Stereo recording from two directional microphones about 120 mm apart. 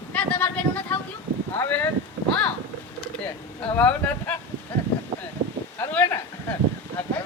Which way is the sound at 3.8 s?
10° left (ahead or behind).